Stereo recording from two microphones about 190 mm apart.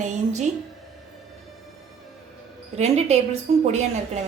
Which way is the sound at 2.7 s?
35° right (ahead or behind).